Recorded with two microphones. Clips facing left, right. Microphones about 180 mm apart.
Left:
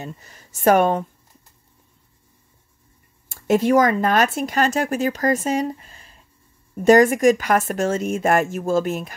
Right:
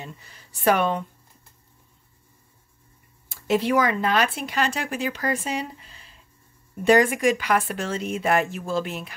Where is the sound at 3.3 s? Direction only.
45° left (ahead or behind).